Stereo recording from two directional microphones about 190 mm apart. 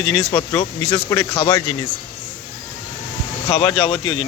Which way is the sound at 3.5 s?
25° left (ahead or behind).